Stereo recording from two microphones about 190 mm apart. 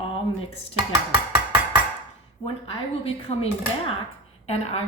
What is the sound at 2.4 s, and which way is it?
A woman's voice, 30° left (ahead or behind).